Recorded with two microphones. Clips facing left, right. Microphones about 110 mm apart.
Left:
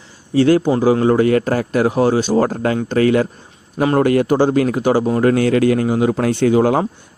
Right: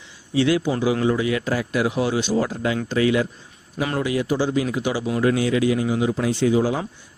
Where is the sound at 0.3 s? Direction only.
45° left (ahead or behind).